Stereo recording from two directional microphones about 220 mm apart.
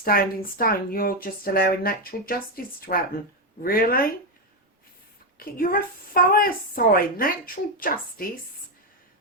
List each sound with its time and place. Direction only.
0.0 s speech: 40° left (ahead or behind)
5.4 s speech: 40° left (ahead or behind)